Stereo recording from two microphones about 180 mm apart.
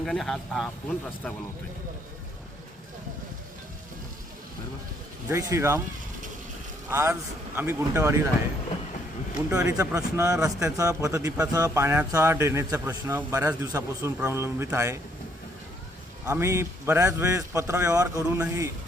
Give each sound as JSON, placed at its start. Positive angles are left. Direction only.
{"t": 0.0, "sound": "speech", "side_deg": 0}
{"t": 5.3, "sound": "speech", "side_deg": -15}
{"t": 6.9, "sound": "speech", "side_deg": -15}
{"t": 9.5, "sound": "speech", "side_deg": -15}
{"t": 16.2, "sound": "speech", "side_deg": -15}